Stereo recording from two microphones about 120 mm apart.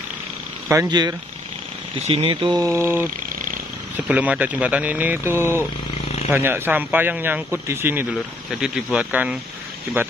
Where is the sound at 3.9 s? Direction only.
10° right (ahead or behind).